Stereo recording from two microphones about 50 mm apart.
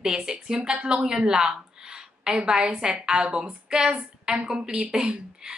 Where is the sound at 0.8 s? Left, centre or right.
Centre.